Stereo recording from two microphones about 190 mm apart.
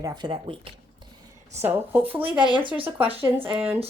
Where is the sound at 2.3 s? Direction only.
25° right (ahead or behind).